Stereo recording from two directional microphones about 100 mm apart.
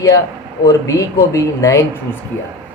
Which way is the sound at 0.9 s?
35° left (ahead or behind).